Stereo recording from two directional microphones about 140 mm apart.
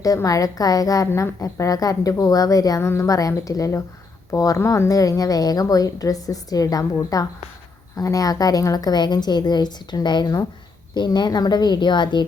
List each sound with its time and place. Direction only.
0.0 s a woman's voice: 25° left (ahead or behind)